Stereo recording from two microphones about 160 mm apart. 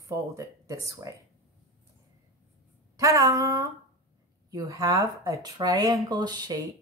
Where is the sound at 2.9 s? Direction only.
20° right (ahead or behind).